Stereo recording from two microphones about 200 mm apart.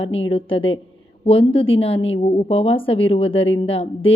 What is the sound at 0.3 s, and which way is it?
A woman's voice, 25° left (ahead or behind).